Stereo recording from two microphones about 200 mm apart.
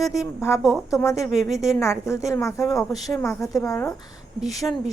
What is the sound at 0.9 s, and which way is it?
A woman's voice, 15° left (ahead or behind).